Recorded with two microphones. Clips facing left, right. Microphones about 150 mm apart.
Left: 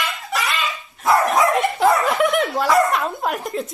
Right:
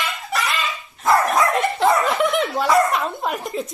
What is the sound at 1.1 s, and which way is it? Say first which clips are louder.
Dog: left 2 dB; 20° left (ahead or behind).